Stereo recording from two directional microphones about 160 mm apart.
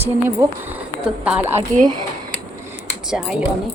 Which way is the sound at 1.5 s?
50° right (ahead or behind).